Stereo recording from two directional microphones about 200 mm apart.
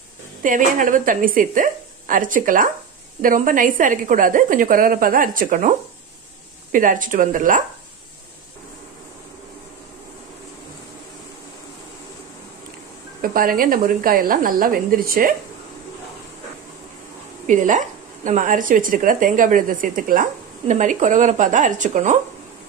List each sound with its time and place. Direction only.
0.4 s a woman's voice: 40° right (ahead or behind)
13.2 s a woman's voice: 45° right (ahead or behind)
17.5 s speech: 40° right (ahead or behind)